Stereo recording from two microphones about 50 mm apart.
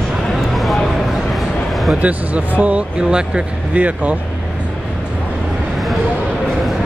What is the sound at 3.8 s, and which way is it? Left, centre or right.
Speech, right.